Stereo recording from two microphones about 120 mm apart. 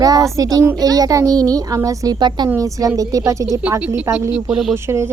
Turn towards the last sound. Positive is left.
turn(degrees=-20)  # may be behind; listen again after turning